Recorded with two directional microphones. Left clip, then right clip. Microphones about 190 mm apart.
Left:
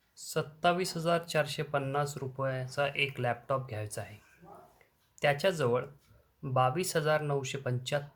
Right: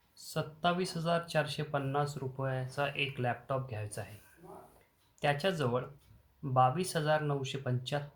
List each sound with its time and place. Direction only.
0.3 s speech: 40° left (ahead or behind)
5.2 s speech: 40° left (ahead or behind)